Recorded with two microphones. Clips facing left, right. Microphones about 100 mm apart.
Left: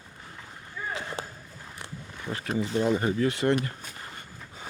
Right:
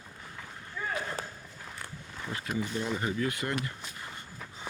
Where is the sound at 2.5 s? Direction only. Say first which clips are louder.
Left 8 dB; 35° left (ahead or behind).